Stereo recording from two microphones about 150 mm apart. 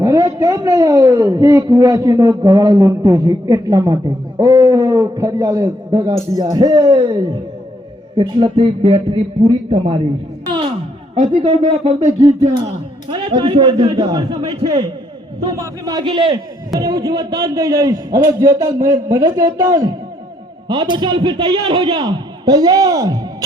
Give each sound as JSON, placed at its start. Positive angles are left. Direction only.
{"t": 0.0, "sound": "a man's voice", "side_deg": -25}